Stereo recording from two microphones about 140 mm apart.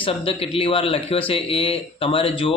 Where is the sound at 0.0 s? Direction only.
45° left (ahead or behind).